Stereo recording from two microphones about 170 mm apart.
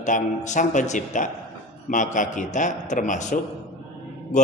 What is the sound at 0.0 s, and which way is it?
A man's voice, 45° left (ahead or behind).